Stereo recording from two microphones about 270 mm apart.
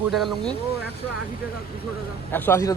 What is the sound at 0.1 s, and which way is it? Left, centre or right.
Speech, centre.